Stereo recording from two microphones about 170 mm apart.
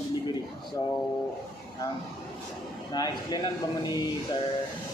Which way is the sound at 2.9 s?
25° left (ahead or behind).